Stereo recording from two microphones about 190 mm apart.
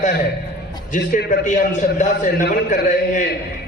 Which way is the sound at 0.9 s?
45° left (ahead or behind).